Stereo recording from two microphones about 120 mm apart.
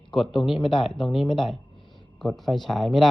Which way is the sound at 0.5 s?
45° left (ahead or behind).